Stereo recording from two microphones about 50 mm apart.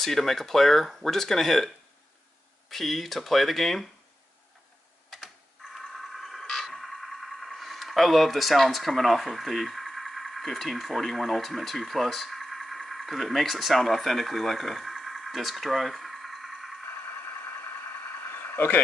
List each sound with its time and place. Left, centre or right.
0.0 s speech: centre
2.7 s speech: centre
5.8 s scrape: centre
6.4 s speech: centre
18.3 s vehicle: left